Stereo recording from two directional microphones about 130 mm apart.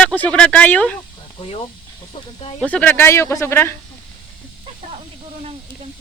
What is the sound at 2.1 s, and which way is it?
Speech, 45° left (ahead or behind).